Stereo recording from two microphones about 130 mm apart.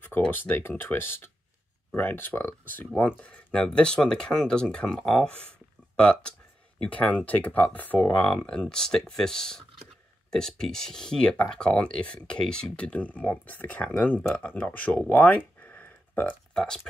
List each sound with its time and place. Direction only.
0.0 s speech: 15° left (ahead or behind)